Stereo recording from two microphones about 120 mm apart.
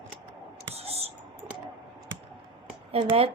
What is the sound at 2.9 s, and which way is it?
Speech, 55° right (ahead or behind).